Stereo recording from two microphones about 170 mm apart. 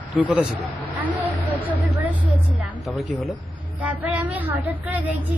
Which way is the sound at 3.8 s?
10° right (ahead or behind).